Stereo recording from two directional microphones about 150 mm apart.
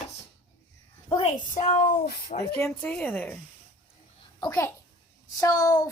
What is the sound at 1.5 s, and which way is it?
Speech, 55° left (ahead or behind).